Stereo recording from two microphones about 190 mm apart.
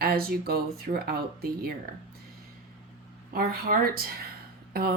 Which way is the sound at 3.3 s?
50° right (ahead or behind).